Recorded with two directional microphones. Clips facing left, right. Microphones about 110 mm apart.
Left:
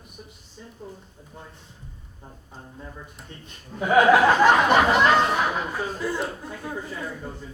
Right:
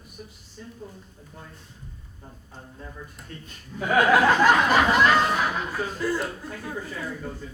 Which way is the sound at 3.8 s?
20° left (ahead or behind).